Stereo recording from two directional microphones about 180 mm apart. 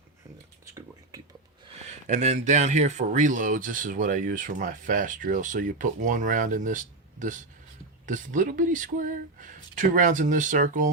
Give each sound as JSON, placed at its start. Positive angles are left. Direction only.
{"t": 2.0, "sound": "speech", "side_deg": -40}